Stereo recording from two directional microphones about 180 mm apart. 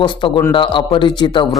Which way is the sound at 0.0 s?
25° left (ahead or behind).